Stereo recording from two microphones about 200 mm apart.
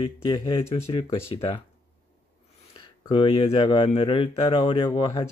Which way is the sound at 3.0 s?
25° left (ahead or behind).